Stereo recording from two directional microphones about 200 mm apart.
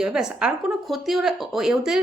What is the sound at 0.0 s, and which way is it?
Speech, 5° right (ahead or behind).